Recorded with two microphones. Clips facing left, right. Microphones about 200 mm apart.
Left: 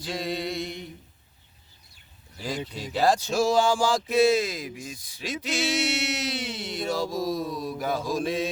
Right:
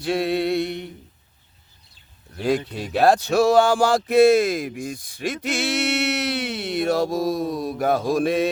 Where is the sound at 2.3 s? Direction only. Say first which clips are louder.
Right 10 dB; 65° right (ahead or behind).